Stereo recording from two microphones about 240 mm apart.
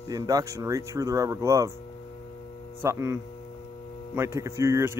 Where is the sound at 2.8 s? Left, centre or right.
Centre.